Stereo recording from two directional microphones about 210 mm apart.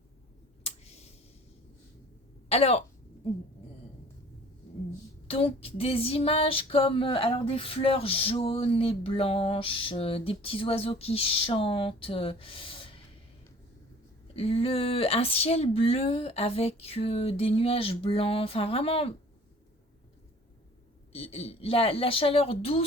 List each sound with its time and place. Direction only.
0.6 s a sound: 30° left (ahead or behind)
2.5 s speech: 30° left (ahead or behind)
5.3 s female singing: 25° left (ahead or behind)
14.3 s female singing: 25° left (ahead or behind)
21.1 s female singing: 30° left (ahead or behind)